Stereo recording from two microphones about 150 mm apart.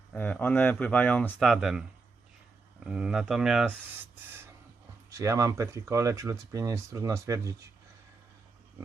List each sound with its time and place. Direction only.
0.1 s speech: 10° left (ahead or behind)
1.4 s speech: centre (ahead or behind)
2.8 s speech: 5° right (ahead or behind)
5.1 s speech: 20° right (ahead or behind)